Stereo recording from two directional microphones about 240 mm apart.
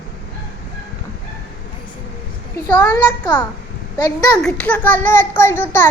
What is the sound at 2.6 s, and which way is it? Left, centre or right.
A child's voice, centre.